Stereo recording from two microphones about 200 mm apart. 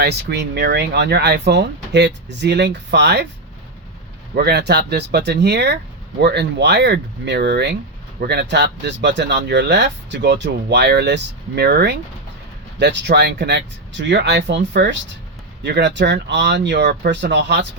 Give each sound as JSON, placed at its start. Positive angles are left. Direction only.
{"t": 0.0, "sound": "speech", "side_deg": -55}
{"t": 4.4, "sound": "speech", "side_deg": -55}